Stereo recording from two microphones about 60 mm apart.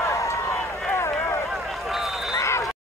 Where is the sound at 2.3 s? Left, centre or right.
Left.